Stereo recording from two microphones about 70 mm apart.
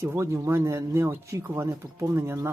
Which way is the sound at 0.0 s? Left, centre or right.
Right.